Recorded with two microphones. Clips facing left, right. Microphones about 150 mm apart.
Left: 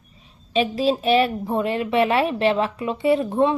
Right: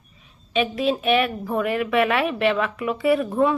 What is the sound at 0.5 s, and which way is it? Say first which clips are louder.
A woman's voice: left 2 dB; 30° left (ahead or behind).